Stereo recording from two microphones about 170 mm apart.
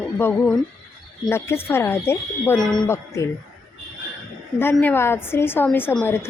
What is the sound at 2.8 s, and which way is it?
Speech, 15° left (ahead or behind).